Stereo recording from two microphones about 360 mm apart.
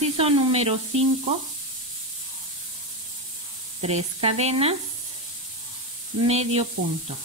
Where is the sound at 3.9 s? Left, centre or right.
Centre.